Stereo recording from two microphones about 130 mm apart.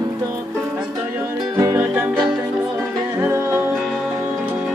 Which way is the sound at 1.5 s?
20° right (ahead or behind).